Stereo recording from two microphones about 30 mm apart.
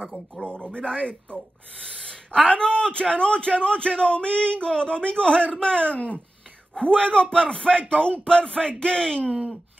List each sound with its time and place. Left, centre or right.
0.4 s a man's voice: left